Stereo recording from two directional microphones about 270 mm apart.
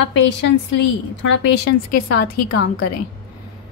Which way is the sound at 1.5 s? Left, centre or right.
Left.